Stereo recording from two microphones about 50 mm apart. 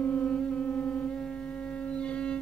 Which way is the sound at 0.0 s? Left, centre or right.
Left.